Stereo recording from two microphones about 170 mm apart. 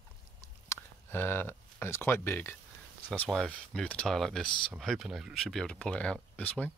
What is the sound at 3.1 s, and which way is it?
Speech, 5° left (ahead or behind).